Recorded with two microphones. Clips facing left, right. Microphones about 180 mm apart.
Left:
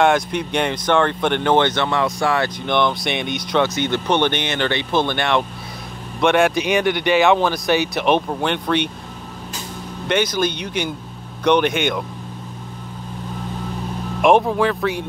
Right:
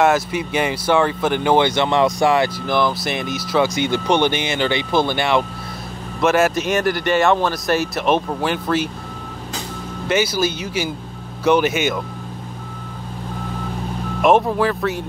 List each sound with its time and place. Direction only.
0.0 s speech: 5° right (ahead or behind)
2.6 s speech: 5° right (ahead or behind)
10.0 s speech: 5° right (ahead or behind)
14.2 s speech: centre (ahead or behind)